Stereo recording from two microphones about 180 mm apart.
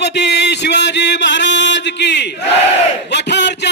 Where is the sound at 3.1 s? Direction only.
70° left (ahead or behind).